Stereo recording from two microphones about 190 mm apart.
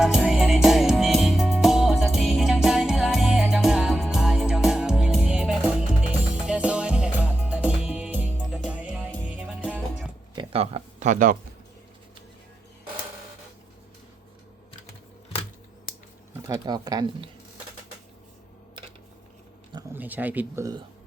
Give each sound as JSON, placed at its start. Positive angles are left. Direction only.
{"t": 0.0, "sound": "music", "side_deg": -5}
{"t": 10.3, "sound": "a sound", "side_deg": -30}
{"t": 16.5, "sound": "speech", "side_deg": -20}
{"t": 19.7, "sound": "speech", "side_deg": -10}